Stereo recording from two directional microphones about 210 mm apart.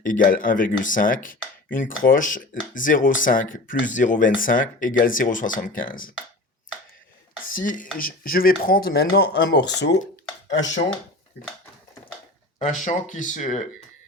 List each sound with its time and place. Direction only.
0.0 s speech: 40° left (ahead or behind)
7.5 s speech: 40° left (ahead or behind)
12.5 s speech: 35° left (ahead or behind)